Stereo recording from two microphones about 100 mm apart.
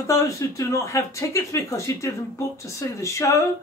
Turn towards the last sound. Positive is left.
turn(degrees=30)  # may be behind; listen again after turning